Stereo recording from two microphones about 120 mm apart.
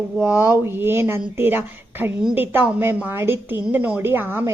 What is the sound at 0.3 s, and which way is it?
A woman's voice, 15° right (ahead or behind).